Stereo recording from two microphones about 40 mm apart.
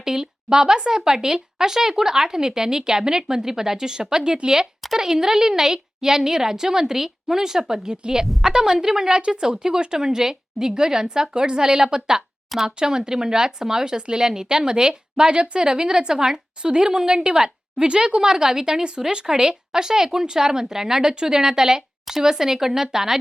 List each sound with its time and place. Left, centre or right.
0.0 s speech: centre